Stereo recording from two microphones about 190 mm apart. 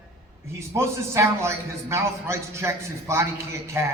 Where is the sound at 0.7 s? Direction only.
15° right (ahead or behind).